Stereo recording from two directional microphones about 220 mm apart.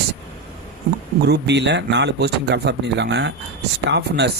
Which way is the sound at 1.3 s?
50° right (ahead or behind).